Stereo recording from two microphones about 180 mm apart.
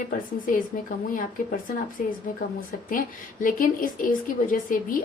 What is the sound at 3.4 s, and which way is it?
A woman's voice, 50° left (ahead or behind).